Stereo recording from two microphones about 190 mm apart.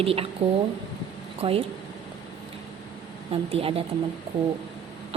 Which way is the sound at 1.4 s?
30° right (ahead or behind).